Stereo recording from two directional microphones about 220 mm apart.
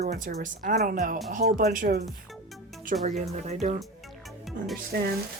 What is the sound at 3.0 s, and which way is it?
Speech, 30° right (ahead or behind).